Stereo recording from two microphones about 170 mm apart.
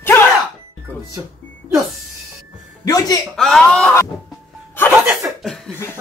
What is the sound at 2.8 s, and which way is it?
Speech, 20° left (ahead or behind).